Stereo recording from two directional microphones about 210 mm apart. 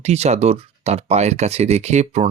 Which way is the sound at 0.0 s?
30° right (ahead or behind).